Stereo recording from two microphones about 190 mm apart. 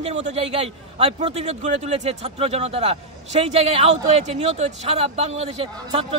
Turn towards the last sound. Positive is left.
turn(degrees=-35)  # may be behind; listen again after turning